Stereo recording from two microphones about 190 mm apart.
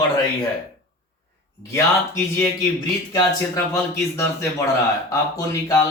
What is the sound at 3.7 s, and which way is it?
Speech, 15° left (ahead or behind).